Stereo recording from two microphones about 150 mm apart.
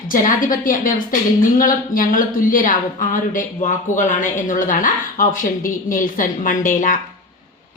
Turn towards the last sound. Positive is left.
turn(degrees=60)  # may be behind; listen again after turning